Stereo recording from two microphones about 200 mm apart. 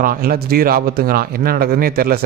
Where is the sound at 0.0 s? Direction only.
45° right (ahead or behind).